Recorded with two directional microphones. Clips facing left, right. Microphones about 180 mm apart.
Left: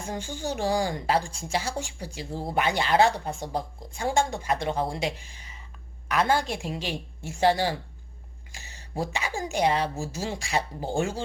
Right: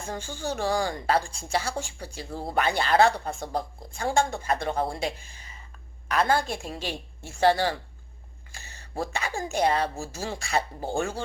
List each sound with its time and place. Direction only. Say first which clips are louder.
0.1 s speech: even; 15° left (ahead or behind)
6.1 s speech: even; 15° left (ahead or behind)